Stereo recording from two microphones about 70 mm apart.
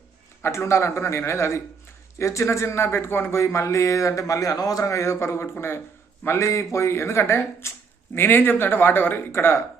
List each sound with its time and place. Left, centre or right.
0.4 s a man's voice: left